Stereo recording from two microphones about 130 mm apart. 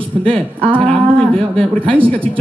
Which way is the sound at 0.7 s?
10° left (ahead or behind).